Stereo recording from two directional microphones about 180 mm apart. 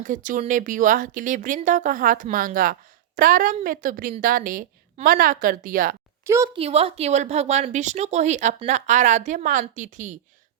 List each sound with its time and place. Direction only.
0.0 s speech: 45° right (ahead or behind)
6.2 s a woman's voice: 15° right (ahead or behind)
6.5 s a woman's voice: 35° right (ahead or behind)